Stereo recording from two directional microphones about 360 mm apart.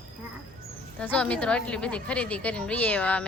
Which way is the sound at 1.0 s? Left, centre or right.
Centre.